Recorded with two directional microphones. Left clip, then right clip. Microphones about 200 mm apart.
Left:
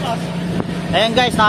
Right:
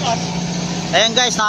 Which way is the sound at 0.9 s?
5° left (ahead or behind).